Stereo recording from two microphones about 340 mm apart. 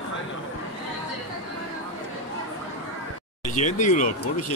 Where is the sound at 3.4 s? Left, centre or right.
Left.